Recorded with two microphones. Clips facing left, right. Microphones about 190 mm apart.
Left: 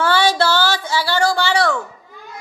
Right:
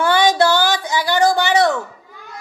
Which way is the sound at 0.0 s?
15° right (ahead or behind).